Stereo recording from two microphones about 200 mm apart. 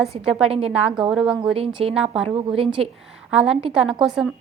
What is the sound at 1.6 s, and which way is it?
A woman's voice, 30° right (ahead or behind).